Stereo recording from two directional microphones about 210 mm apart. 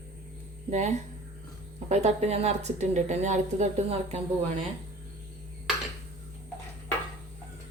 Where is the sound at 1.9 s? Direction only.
30° right (ahead or behind).